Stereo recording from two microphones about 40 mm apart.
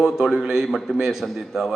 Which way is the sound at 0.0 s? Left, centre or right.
Centre.